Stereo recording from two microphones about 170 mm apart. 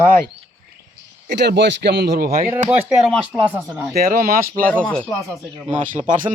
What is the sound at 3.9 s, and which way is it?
Speech, 60° right (ahead or behind).